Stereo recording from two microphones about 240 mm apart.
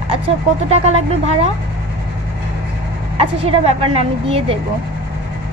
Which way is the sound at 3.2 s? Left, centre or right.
Right.